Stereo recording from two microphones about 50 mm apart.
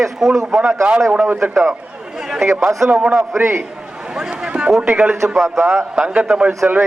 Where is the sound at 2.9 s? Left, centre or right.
Right.